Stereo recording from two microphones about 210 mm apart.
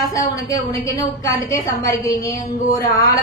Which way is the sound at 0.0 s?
15° left (ahead or behind).